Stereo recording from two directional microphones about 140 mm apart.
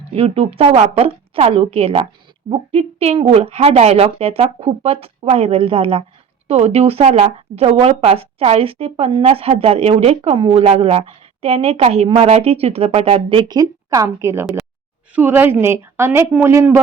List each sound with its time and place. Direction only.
0.1 s a woman's voice: 45° right (ahead or behind); by 14.4 s 20° right (ahead or behind)
14.4 s speech: 5° right (ahead or behind)
15.1 s a woman's voice: 15° right (ahead or behind)